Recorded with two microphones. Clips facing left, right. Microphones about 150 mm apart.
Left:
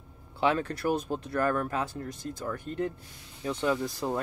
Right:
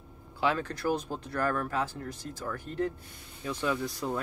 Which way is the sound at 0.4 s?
20° left (ahead or behind).